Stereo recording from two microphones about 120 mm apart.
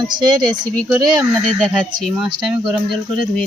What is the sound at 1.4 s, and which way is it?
Speech, 5° left (ahead or behind).